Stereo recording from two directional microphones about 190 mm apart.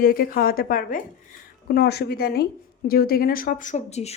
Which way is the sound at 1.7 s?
55° left (ahead or behind).